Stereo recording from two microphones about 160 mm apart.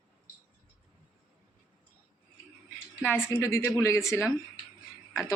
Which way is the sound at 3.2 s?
15° left (ahead or behind).